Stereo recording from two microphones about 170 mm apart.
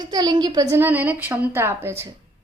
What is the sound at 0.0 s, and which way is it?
A woman's voice, 25° right (ahead or behind).